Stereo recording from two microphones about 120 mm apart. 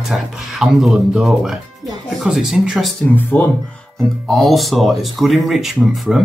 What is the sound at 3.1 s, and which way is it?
Speech, 15° left (ahead or behind).